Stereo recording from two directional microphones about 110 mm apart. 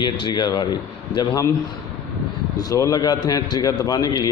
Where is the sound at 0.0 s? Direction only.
40° left (ahead or behind).